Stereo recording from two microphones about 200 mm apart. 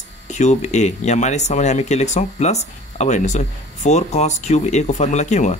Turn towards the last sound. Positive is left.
turn(degrees=35)  # may be behind; listen again after turning